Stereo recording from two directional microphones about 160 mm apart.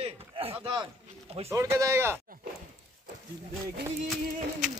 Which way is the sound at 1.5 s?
20° right (ahead or behind).